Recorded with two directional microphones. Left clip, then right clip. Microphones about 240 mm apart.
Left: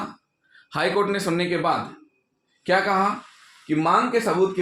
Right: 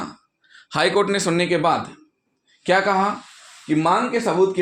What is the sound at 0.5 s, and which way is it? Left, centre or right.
Speech, right.